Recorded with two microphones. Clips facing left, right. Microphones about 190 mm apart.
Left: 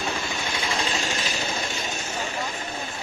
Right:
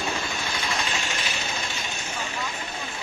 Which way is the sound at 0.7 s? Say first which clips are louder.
Left 4 dB; 40° left (ahead or behind).